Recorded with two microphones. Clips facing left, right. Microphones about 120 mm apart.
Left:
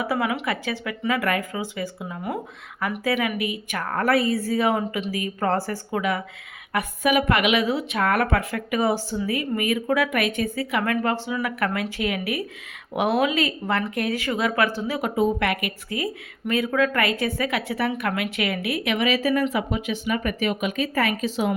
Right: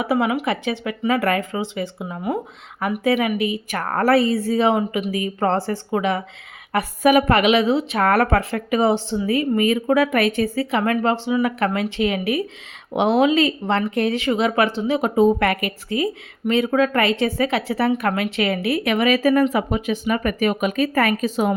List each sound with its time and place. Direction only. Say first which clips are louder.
0.0 s speech: right 4 dB; 20° right (ahead or behind)
1.0 s speech: right 4 dB; 35° right (ahead or behind)
3.8 s speech: right 4 dB; 40° right (ahead or behind)
6.7 s a woman's voice: right 5 dB; 40° right (ahead or behind)
7.9 s a woman's voice: right 3 dB; 40° right (ahead or behind)